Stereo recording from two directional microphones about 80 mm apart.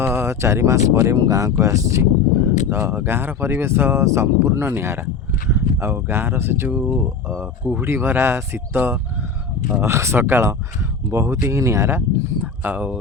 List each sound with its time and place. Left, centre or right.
0.0 s speech: right
1.1 s speech: right; by 13.0 s centre